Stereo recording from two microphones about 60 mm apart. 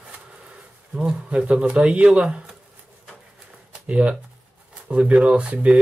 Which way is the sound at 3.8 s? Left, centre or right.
Centre.